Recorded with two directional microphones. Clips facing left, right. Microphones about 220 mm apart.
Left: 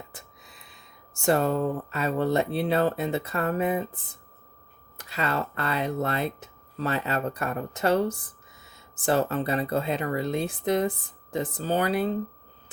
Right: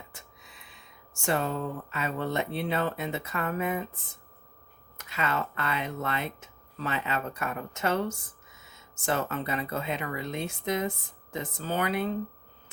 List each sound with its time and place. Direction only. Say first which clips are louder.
0.1 s speech: left 3 dB; 35° left (ahead or behind)